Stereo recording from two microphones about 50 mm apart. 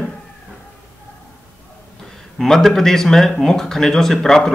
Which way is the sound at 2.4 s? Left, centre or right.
Centre.